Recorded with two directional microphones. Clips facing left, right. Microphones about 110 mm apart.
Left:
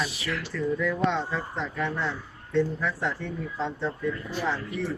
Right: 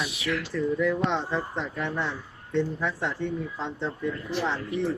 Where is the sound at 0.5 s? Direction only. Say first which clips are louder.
Right 2 dB; 20° right (ahead or behind).